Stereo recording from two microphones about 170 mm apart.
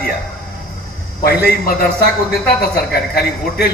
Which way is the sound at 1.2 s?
65° left (ahead or behind).